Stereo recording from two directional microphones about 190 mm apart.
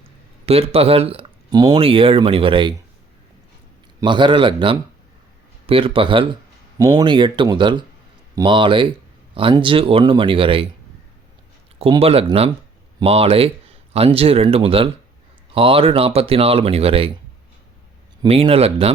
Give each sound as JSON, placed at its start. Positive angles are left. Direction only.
{"t": 0.4, "sound": "speech", "side_deg": -30}
{"t": 4.0, "sound": "speech", "side_deg": -25}
{"t": 11.8, "sound": "speech", "side_deg": -30}
{"t": 18.2, "sound": "speech", "side_deg": -30}